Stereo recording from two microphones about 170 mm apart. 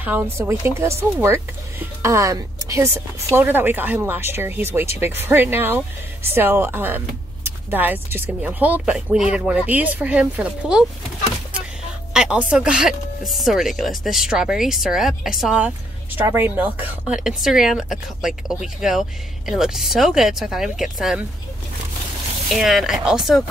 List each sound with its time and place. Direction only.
0.0 s a woman's voice: 10° right (ahead or behind)
12.1 s speech: 5° right (ahead or behind)
22.5 s speech: centre (ahead or behind)